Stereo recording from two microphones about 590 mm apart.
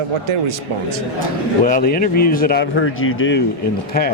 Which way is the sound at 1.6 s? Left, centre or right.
Centre.